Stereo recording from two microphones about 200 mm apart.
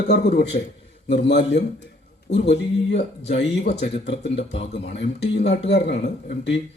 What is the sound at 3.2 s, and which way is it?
Speech, 60° left (ahead or behind).